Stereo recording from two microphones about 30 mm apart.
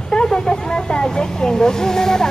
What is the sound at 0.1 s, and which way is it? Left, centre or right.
Speech, left.